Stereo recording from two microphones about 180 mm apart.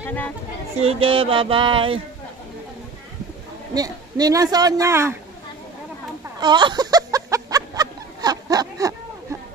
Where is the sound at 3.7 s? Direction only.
20° right (ahead or behind).